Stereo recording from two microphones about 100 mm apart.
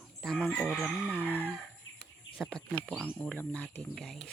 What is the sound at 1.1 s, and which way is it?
Chicken, 20° right (ahead or behind).